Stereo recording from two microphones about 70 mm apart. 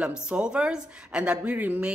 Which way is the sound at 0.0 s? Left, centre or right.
Centre.